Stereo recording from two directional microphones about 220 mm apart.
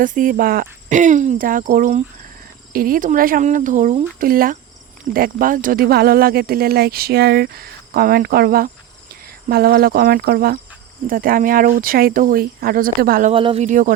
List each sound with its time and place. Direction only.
0.0 s speech: 35° right (ahead or behind)
13.3 s speech: 25° right (ahead or behind)